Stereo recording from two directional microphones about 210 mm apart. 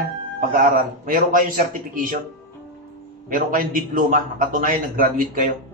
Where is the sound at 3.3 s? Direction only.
40° right (ahead or behind).